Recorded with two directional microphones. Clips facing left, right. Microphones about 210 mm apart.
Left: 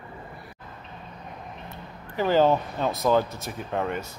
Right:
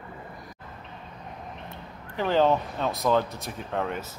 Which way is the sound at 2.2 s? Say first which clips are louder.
Left 2 dB; centre (ahead or behind).